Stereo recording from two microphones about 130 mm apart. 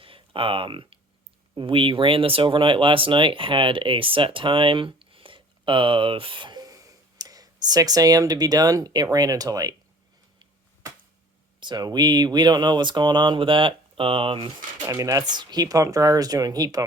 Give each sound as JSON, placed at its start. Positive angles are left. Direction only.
{"t": 0.0, "sound": "speech", "side_deg": -45}
{"t": 11.6, "sound": "speech", "side_deg": -35}
{"t": 14.8, "sound": "speech", "side_deg": -25}